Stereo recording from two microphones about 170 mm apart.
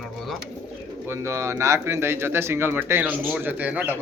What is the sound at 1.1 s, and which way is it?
Speech, 15° right (ahead or behind).